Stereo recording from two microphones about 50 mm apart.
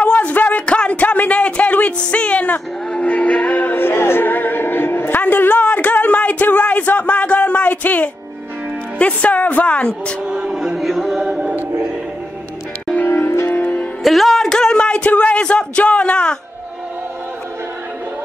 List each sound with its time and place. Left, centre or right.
0.0 s a sound: left
2.9 s music: left
3.7 s music: left
8.9 s speech: left
10.2 s speech: centre
10.8 s a capella: centre
11.2 s a capella: centre
13.0 s music: left
13.5 s music: left
14.0 s speech: centre; by 16.3 s left